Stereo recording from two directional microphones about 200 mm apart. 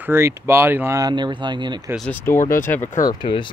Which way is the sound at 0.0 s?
10° right (ahead or behind).